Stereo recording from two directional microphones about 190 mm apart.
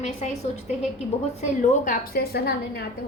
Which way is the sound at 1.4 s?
50° left (ahead or behind).